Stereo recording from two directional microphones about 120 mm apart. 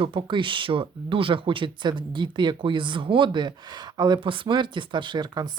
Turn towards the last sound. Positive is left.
turn(degrees=-35)  # may be behind; listen again after turning